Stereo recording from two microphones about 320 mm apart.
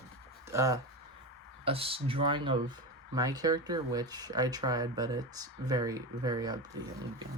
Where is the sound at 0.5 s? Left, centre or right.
Centre.